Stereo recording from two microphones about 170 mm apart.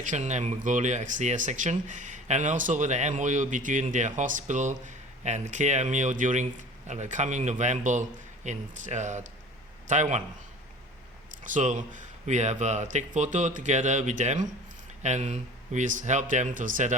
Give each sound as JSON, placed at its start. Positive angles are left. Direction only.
{"t": 0.0, "sound": "speech", "side_deg": -45}
{"t": 11.4, "sound": "speech", "side_deg": -50}